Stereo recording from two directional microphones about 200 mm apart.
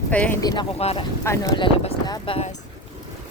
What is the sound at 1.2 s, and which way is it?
Speech, 15° left (ahead or behind).